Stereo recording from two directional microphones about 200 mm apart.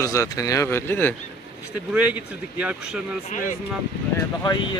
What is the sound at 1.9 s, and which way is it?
Speech, 5° right (ahead or behind).